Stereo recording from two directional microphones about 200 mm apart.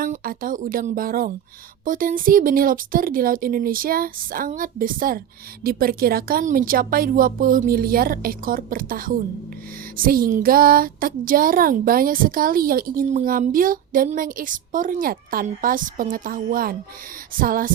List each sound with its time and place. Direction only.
0.0 s speech: 45° right (ahead or behind)